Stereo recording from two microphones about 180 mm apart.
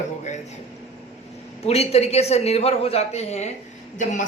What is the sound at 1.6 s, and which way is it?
A woman's voice, 35° left (ahead or behind).